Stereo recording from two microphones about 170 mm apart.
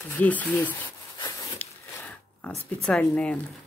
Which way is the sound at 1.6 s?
10° left (ahead or behind).